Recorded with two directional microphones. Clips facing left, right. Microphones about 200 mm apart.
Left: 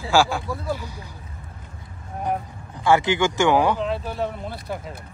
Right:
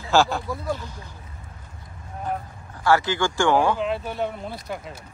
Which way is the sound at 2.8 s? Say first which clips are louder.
Left 2 dB; 20° left (ahead or behind).